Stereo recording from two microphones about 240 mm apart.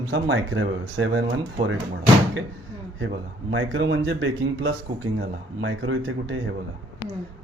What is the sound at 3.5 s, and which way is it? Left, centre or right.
Speech, right.